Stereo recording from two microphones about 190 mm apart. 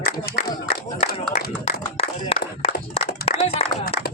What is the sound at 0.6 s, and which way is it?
Speech, 50° left (ahead or behind).